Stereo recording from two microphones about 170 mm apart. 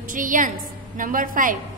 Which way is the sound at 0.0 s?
50° right (ahead or behind).